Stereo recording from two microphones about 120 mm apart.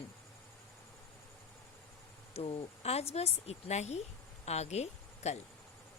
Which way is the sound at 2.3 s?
55° left (ahead or behind).